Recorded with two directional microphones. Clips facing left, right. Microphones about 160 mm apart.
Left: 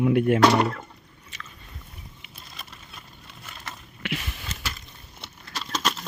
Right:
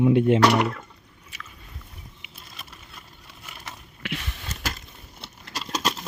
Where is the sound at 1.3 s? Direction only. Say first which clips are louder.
Even; 5° right (ahead or behind).